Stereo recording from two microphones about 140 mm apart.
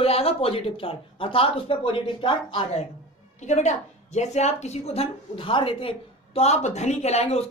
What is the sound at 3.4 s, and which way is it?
Speech, 55° left (ahead or behind).